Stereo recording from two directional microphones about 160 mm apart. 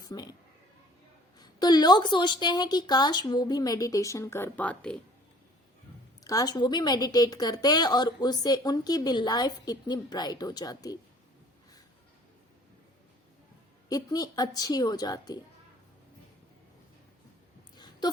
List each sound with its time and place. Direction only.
0.1 s a woman's voice: 25° left (ahead or behind)
1.4 s a woman's voice: 25° left (ahead or behind); by 4.9 s 5° left (ahead or behind)
6.2 s a woman's voice: 25° left (ahead or behind)
13.9 s a woman's voice: 25° left (ahead or behind)
17.7 s a sound: 25° left (ahead or behind)